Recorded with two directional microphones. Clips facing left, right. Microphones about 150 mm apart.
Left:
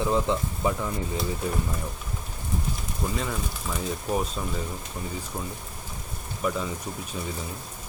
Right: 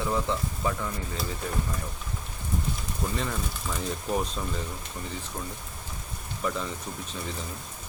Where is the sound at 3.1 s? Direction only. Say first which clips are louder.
Left 1 dB; 5° left (ahead or behind).